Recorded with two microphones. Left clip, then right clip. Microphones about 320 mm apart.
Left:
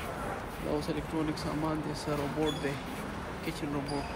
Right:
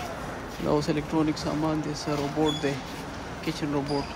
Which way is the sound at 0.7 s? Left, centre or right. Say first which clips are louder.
Right 8 dB; right.